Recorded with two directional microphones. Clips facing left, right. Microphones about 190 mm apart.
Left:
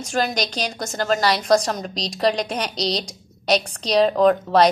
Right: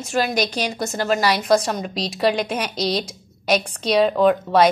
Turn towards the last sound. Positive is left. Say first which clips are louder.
# even
turn(degrees=-5)  # may be behind; listen again after turning